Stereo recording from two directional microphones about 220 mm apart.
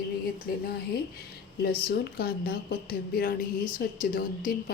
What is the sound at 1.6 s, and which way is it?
A woman's voice, 45° left (ahead or behind).